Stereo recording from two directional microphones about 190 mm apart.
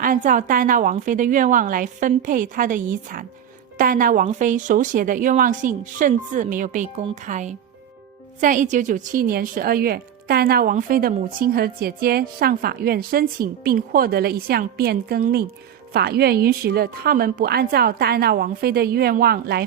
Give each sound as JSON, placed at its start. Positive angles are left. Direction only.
{"t": 0.0, "sound": "a woman's voice", "side_deg": -45}